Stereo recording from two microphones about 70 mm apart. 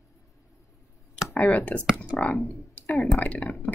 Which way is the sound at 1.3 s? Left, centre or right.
Left.